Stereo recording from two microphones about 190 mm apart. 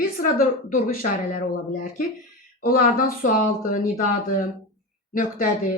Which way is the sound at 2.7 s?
50° left (ahead or behind).